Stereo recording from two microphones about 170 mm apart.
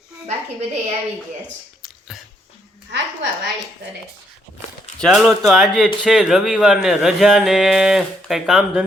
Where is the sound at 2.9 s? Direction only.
90° right.